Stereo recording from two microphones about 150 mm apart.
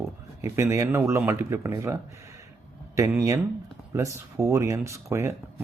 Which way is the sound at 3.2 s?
20° right (ahead or behind).